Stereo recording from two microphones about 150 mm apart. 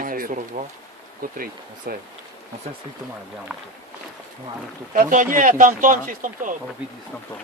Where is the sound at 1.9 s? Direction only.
85° right.